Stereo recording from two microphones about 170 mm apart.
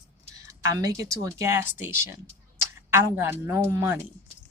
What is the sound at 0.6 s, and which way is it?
A woman's voice, 20° right (ahead or behind).